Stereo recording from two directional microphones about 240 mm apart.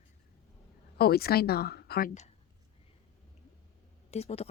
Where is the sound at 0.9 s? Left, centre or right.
Left.